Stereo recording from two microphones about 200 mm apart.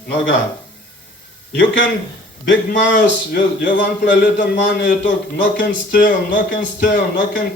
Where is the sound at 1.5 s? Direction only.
65° left (ahead or behind).